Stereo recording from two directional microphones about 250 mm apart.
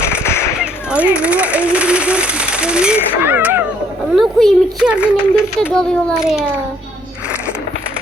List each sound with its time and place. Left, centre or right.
0.2 s firecracker: centre
0.6 s a child's voice: centre